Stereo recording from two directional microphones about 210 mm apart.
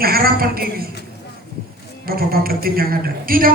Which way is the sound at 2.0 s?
45° right (ahead or behind).